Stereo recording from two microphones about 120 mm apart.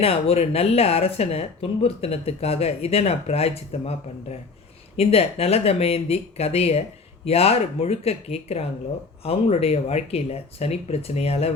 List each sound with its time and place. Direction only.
0.0 s speech: 55° left (ahead or behind)